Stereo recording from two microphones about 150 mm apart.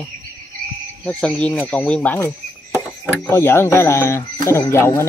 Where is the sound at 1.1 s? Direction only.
5° left (ahead or behind).